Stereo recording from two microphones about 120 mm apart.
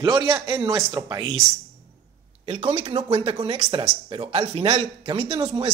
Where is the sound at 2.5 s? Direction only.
50° right (ahead or behind).